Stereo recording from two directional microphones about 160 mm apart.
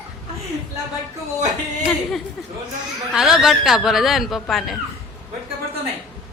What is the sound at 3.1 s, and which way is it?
Speech, 5° right (ahead or behind).